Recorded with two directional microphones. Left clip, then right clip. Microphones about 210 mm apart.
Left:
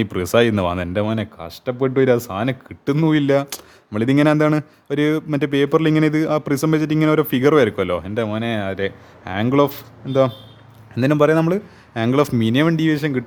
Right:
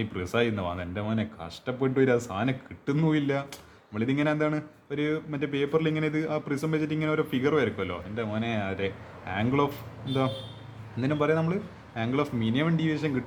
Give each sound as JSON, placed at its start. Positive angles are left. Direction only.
{"t": 0.0, "sound": "speech", "side_deg": 55}